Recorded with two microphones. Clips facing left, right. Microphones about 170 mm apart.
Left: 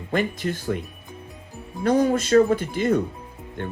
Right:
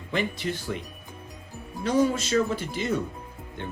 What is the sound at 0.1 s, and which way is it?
Speech, 45° left (ahead or behind).